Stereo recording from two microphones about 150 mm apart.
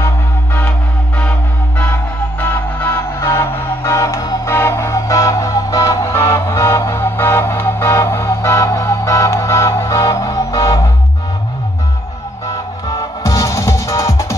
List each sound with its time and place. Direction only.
0.6 s music: 10° left (ahead or behind)
2.4 s music: 10° left (ahead or behind)
12.8 s music: 25° left (ahead or behind)